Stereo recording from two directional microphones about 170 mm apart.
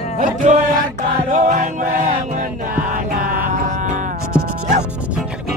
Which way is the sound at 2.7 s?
55° right (ahead or behind).